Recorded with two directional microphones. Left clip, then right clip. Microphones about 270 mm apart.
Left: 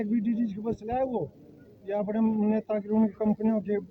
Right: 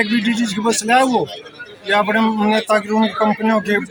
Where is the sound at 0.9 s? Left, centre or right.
Right.